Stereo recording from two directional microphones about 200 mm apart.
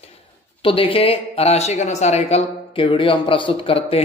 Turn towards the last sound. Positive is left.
turn(degrees=25)  # may be behind; listen again after turning